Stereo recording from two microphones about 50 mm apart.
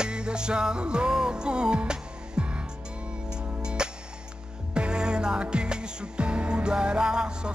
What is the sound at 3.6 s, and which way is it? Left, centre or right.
Music, centre.